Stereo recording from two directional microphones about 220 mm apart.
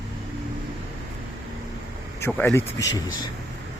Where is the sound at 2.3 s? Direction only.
5° left (ahead or behind).